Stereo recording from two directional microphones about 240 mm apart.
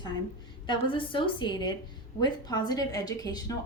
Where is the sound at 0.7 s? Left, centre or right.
Left.